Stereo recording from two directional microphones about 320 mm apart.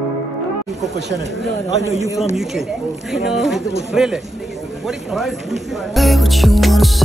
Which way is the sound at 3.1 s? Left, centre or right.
Centre.